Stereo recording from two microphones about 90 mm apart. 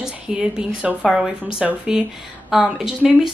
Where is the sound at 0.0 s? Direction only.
5° right (ahead or behind).